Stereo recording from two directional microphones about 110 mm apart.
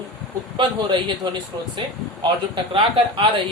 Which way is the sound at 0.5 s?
50° right (ahead or behind).